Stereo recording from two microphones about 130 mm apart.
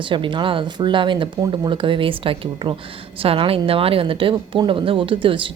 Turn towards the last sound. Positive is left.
turn(degrees=-40)  # may be behind; listen again after turning